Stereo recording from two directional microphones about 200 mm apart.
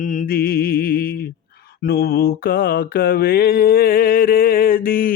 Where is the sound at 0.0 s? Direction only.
40° left (ahead or behind).